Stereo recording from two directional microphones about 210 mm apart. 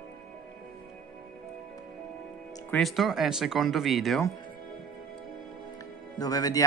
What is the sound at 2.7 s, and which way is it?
Speech, centre (ahead or behind).